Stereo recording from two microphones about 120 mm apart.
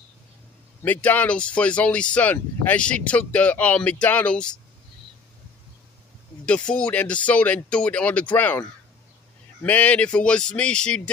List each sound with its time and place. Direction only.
0.8 s speech: 15° left (ahead or behind)
6.4 s speech: 10° left (ahead or behind)